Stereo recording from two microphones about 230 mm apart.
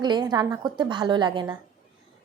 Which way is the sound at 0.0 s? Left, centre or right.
Centre.